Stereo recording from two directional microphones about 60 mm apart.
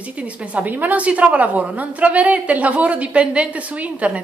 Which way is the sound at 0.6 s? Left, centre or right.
Right.